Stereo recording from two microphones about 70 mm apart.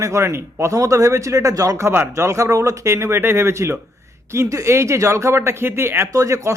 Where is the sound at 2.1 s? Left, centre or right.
Right.